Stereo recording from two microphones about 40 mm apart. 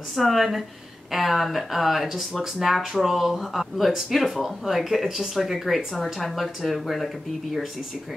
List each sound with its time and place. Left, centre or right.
0.1 s speech: centre